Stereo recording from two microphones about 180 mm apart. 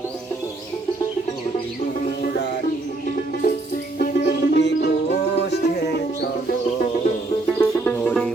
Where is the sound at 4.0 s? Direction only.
55° left (ahead or behind).